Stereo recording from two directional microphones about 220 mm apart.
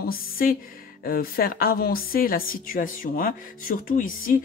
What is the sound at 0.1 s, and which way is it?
A woman's voice, 40° left (ahead or behind).